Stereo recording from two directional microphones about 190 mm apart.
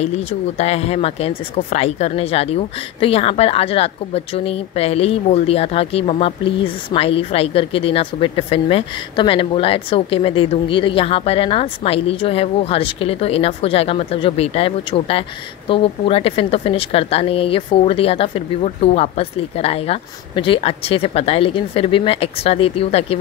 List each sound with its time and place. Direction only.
0.6 s speech: 35° left (ahead or behind)